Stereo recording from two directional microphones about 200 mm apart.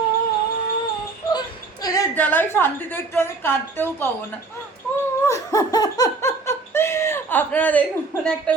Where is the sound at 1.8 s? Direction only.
15° left (ahead or behind).